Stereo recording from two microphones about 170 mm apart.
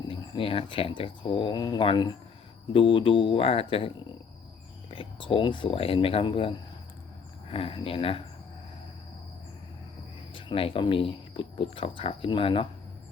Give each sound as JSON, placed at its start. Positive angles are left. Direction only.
{"t": 0.1, "sound": "speech", "side_deg": 30}
{"t": 4.9, "sound": "speech", "side_deg": 30}
{"t": 10.3, "sound": "speech", "side_deg": 30}